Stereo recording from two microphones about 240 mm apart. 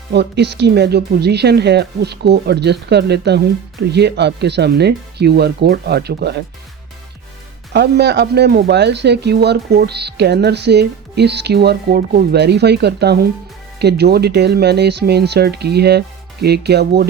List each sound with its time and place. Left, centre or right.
0.1 s speech: right
7.7 s speech: right